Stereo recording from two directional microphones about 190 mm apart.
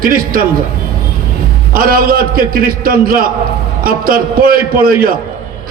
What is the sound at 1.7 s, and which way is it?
A man's voice, 50° right (ahead or behind).